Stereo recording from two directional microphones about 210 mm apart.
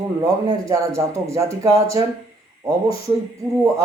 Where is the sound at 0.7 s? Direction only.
15° right (ahead or behind).